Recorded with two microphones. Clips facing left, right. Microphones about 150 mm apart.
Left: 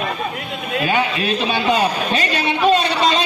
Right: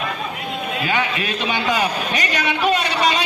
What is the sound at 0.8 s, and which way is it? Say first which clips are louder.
A man's voice: left 4 dB; 25° left (ahead or behind).